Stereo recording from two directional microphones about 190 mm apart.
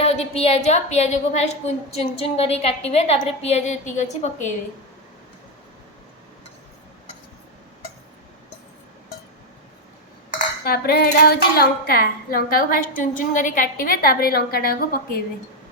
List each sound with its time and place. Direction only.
0.0 s a woman's voice: 30° left (ahead or behind)
10.3 s dishes: 55° left (ahead or behind)